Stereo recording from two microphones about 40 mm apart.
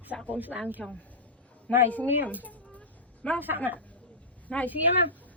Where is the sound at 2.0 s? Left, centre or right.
Right.